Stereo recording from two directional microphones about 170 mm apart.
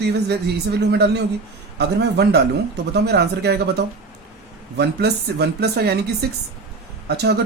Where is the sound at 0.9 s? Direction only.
75° right (ahead or behind).